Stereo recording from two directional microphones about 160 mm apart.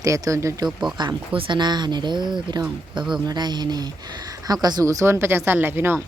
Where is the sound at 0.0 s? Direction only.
20° right (ahead or behind).